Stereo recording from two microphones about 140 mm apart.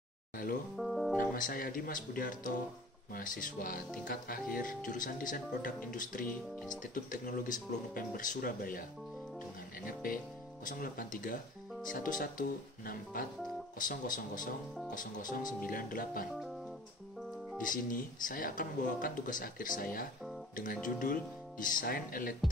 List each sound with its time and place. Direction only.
0.7 s speech: centre (ahead or behind)
1.3 s speech: 90° left
9.8 s speech: 80° left
13.7 s speech: 75° left (ahead or behind)
17.6 s speech: 80° left
21.0 s speech: 75° left (ahead or behind); by 22.3 s 90° left